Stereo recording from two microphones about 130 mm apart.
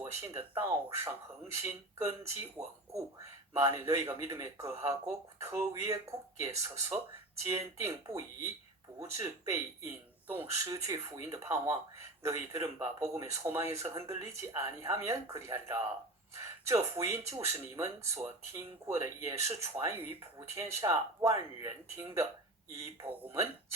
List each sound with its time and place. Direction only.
0.0 s speech: 20° right (ahead or behind)